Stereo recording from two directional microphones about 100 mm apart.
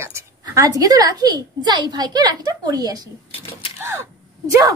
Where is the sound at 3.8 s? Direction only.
25° right (ahead or behind).